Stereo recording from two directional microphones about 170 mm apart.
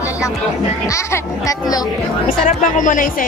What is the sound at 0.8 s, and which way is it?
Speech, 20° left (ahead or behind).